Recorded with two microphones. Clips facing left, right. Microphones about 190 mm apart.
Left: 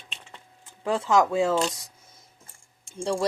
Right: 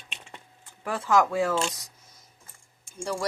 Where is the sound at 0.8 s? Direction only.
20° left (ahead or behind).